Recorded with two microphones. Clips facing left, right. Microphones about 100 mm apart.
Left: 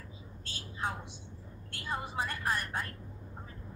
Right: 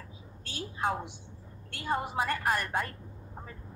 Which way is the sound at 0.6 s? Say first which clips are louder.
Right 6 dB; 55° right (ahead or behind).